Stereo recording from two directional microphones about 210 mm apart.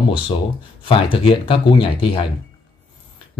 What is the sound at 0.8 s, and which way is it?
Speech, 25° left (ahead or behind).